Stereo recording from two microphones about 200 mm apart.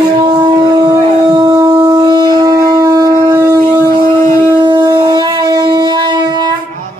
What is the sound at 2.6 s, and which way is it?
Shofar, 20° right (ahead or behind).